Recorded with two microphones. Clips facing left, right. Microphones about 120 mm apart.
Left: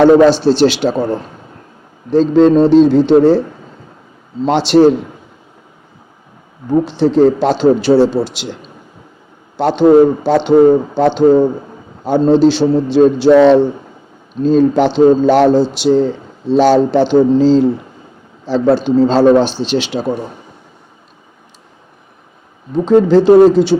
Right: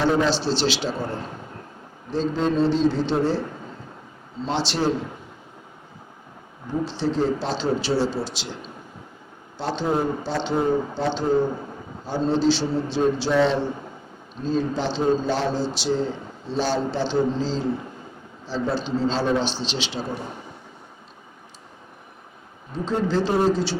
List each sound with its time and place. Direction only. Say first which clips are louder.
0.0 s a man's voice: left 14 dB; 60° left (ahead or behind)
2.1 s a man's voice: left 13 dB; 75° left (ahead or behind)
4.4 s a man's voice: left 14 dB; 65° left (ahead or behind)
6.7 s a man's voice: left 13 dB; 60° left (ahead or behind)
9.6 s a man's voice: left 16 dB; 70° left (ahead or behind)
16.5 s a man's voice: left 14 dB; 75° left (ahead or behind)
22.7 s a man's voice: left 14 dB; 65° left (ahead or behind)